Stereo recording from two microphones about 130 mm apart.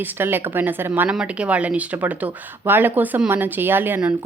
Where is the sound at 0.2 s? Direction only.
15° right (ahead or behind).